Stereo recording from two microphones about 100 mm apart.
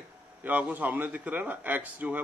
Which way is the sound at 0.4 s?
15° right (ahead or behind).